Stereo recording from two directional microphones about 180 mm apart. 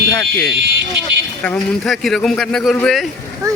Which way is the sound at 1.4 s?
5° left (ahead or behind).